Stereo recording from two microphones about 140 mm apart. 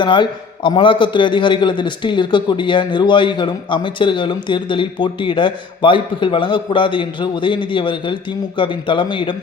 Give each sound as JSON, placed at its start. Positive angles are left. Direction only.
{"t": 0.0, "sound": "a man's voice", "side_deg": 35}